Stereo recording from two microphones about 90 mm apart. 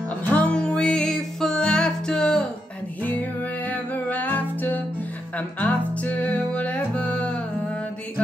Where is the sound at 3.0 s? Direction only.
20° left (ahead or behind).